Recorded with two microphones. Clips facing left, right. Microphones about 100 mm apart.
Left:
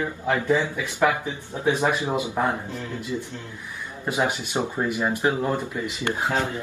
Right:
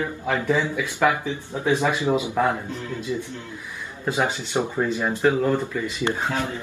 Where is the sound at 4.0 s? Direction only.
15° left (ahead or behind).